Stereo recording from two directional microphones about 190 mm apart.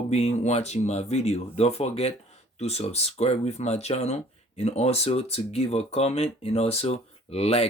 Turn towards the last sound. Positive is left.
turn(degrees=30)  # may be behind; listen again after turning